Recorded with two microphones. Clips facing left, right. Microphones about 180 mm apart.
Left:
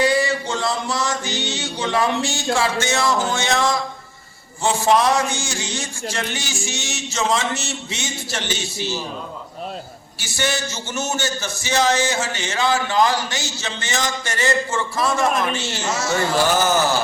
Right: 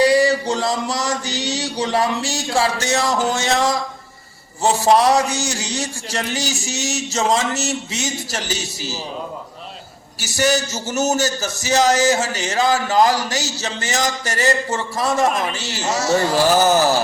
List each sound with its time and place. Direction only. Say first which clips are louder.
0.0 s a man's voice: right 4 dB; 35° right (ahead or behind)
10.2 s a man's voice: right 6 dB; 40° right (ahead or behind)